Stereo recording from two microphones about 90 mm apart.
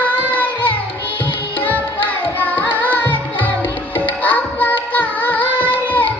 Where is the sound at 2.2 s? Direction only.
20° left (ahead or behind).